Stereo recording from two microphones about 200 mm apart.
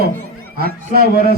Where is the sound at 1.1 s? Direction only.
50° left (ahead or behind).